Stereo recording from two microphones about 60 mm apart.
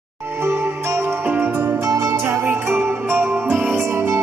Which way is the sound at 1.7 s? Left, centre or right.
Right.